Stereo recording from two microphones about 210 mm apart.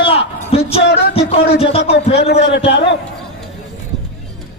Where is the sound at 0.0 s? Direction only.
30° left (ahead or behind).